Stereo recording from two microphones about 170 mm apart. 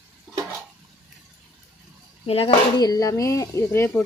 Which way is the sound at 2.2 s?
35° left (ahead or behind).